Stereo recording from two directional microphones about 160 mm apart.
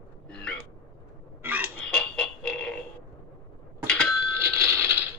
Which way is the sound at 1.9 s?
5° left (ahead or behind).